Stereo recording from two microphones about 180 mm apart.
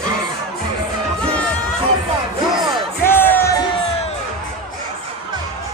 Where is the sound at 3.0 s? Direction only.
10° left (ahead or behind).